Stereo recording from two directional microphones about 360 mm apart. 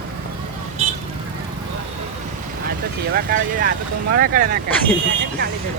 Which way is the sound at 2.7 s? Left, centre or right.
Right.